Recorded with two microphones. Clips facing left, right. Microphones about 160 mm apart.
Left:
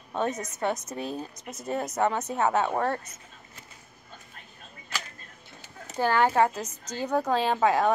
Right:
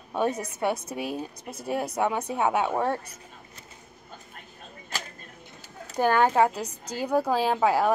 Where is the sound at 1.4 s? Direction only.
35° right (ahead or behind).